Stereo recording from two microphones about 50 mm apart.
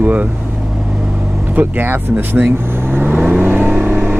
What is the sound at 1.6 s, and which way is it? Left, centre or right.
Speech, right.